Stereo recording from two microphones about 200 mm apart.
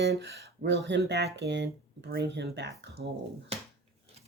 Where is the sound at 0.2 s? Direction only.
55° right (ahead or behind).